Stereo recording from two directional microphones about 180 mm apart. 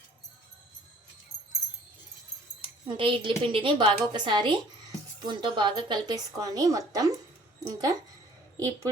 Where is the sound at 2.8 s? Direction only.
30° right (ahead or behind).